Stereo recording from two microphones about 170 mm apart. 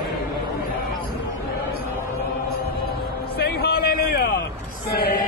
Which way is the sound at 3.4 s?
65° left (ahead or behind).